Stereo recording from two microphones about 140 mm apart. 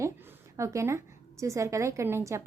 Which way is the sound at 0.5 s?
20° right (ahead or behind).